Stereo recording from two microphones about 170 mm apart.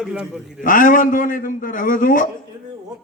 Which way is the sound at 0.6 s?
50° left (ahead or behind).